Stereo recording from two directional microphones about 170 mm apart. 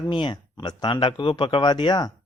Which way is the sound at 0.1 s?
25° left (ahead or behind).